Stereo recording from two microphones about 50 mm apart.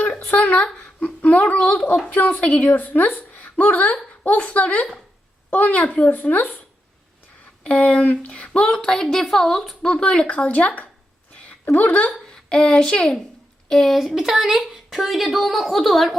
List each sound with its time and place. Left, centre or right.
0.3 s a woman's voice: left
7.6 s a woman's voice: left
8.8 s a woman's voice: centre
9.8 s speech: centre
10.2 s a woman's voice: left
12.0 s speech: centre
13.7 s speech: centre